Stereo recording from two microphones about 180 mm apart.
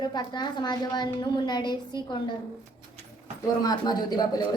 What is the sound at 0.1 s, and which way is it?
A woman's voice, 25° left (ahead or behind).